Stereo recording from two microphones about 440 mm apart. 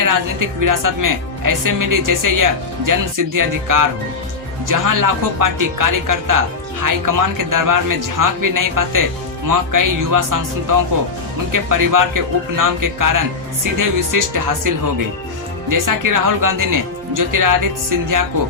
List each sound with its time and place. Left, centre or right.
0.0 s speech: right
15.7 s speech: right